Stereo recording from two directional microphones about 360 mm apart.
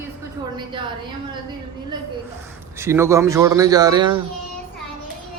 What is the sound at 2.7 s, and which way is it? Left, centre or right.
A man's voice, centre.